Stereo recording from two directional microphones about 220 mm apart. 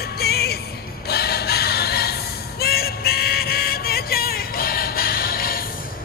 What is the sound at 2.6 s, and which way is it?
Music, 45° left (ahead or behind).